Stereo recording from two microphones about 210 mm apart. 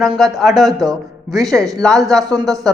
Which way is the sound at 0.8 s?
15° right (ahead or behind).